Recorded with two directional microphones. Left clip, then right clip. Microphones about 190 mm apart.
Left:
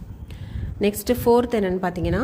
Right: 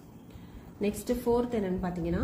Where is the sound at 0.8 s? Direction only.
55° left (ahead or behind).